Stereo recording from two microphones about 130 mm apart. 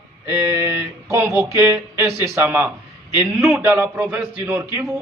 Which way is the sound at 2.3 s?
15° right (ahead or behind).